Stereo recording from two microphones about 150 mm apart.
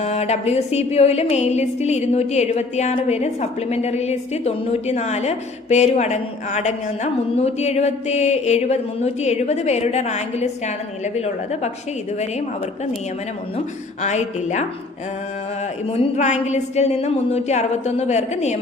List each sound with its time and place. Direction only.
0.0 s speech: 45° left (ahead or behind)
14.0 s speech: 50° left (ahead or behind)
15.9 s speech: 45° left (ahead or behind)